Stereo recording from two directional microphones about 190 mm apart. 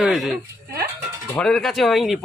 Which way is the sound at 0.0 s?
Centre (ahead or behind).